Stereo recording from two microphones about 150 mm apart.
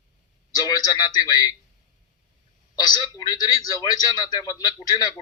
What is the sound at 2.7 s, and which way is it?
A man's voice, 25° left (ahead or behind).